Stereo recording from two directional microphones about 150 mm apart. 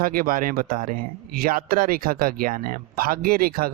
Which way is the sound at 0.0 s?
70° right (ahead or behind).